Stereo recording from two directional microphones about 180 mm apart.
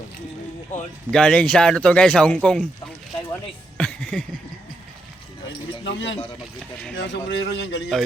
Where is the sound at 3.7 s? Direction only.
5° left (ahead or behind).